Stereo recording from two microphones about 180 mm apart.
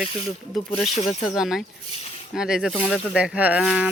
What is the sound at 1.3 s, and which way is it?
Speech, centre (ahead or behind).